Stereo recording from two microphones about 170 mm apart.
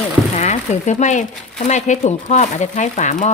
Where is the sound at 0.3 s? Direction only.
40° left (ahead or behind).